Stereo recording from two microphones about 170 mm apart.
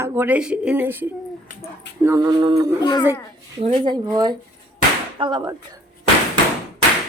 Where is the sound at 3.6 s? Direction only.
35° right (ahead or behind).